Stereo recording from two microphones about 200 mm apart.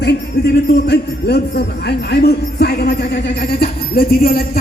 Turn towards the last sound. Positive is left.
turn(degrees=50)  # may be behind; listen again after turning